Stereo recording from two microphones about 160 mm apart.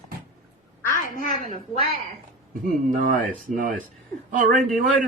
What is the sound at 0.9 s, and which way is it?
Speech, 55° left (ahead or behind).